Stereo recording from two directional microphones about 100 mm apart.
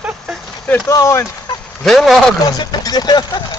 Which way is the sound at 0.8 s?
30° left (ahead or behind).